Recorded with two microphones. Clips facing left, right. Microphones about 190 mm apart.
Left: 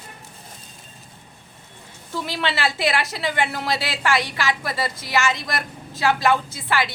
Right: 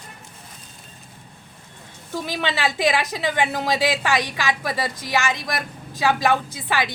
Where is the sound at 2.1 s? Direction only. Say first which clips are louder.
Even; 15° right (ahead or behind).